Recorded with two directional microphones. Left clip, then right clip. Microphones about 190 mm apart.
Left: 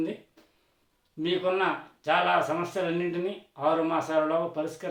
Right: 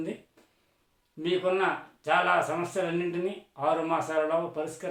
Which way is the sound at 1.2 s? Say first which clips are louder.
Even; 5° right (ahead or behind).